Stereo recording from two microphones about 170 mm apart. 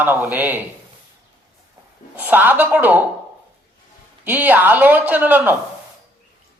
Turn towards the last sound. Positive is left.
turn(degrees=-10)  # may be behind; listen again after turning